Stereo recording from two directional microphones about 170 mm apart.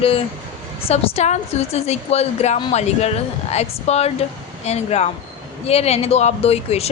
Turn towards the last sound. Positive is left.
turn(degrees=35)  # may be behind; listen again after turning